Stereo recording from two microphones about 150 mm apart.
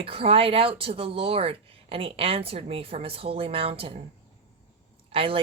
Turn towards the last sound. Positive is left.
turn(degrees=-35)  # may be behind; listen again after turning